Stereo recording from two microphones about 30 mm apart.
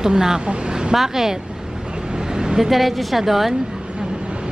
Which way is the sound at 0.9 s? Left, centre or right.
Centre.